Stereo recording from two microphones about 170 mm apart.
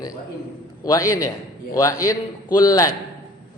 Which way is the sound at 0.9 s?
20° left (ahead or behind).